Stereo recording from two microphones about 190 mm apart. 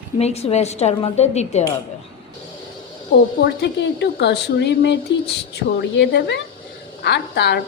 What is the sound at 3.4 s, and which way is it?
A woman's voice, 60° left (ahead or behind).